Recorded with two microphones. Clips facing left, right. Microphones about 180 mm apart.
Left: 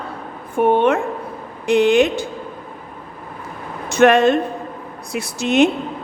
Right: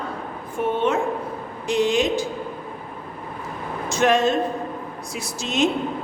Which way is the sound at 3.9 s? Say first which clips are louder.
Left 6 dB; 60° left (ahead or behind).